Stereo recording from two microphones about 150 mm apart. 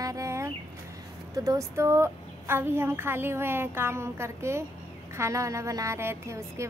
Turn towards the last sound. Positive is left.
turn(degrees=-20)  # may be behind; listen again after turning